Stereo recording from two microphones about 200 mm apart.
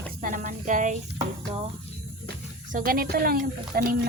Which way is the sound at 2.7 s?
45° right (ahead or behind).